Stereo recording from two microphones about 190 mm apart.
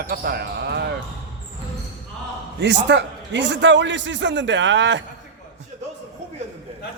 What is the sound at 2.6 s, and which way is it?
A man's voice, 65° right (ahead or behind).